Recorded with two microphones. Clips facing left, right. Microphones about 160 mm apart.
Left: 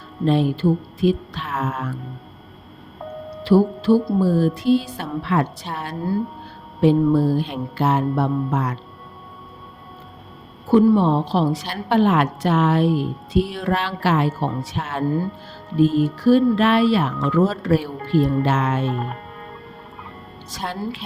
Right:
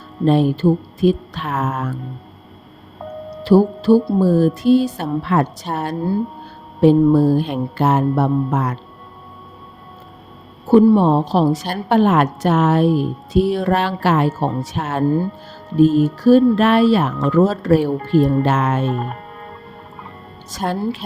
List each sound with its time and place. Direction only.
0.3 s a woman's voice: 45° right (ahead or behind)
3.4 s a woman's voice: 40° right (ahead or behind)
10.9 s a woman's voice: 45° right (ahead or behind)
20.5 s a woman's voice: 45° right (ahead or behind)